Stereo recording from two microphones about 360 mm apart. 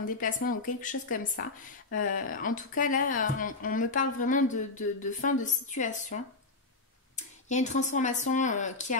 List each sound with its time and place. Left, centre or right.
0.2 s a woman's voice: left
7.2 s a woman's voice: centre